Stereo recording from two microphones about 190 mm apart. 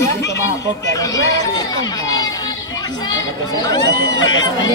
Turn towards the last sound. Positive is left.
turn(degrees=20)  # may be behind; listen again after turning